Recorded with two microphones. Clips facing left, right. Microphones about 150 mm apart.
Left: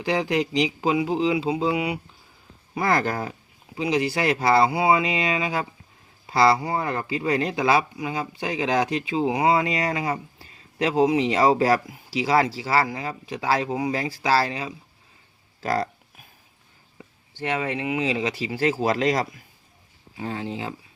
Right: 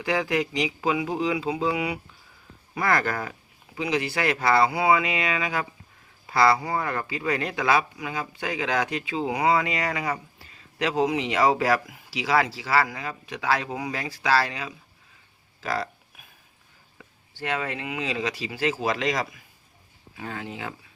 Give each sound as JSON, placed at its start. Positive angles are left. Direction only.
{"t": 0.0, "sound": "speech", "side_deg": 30}
{"t": 17.0, "sound": "speech", "side_deg": 20}
{"t": 18.6, "sound": "speech", "side_deg": 35}
{"t": 20.1, "sound": "speech", "side_deg": 25}